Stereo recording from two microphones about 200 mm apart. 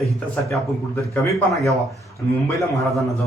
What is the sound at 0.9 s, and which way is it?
Speech, 15° left (ahead or behind).